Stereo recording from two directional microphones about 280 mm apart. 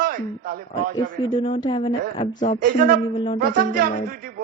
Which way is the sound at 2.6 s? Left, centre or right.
Right.